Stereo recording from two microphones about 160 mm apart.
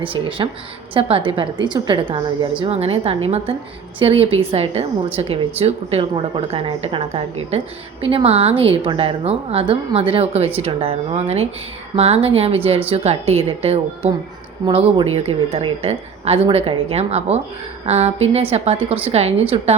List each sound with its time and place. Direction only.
0.0 s a woman's voice: 35° right (ahead or behind)